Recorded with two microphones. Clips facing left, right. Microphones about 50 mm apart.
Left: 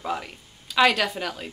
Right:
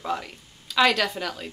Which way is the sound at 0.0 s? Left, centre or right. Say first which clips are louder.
Even; centre.